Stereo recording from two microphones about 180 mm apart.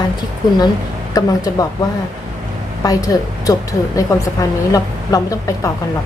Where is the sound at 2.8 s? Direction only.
20° left (ahead or behind).